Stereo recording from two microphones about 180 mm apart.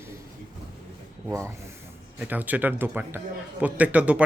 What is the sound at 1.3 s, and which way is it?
Speech, 15° right (ahead or behind).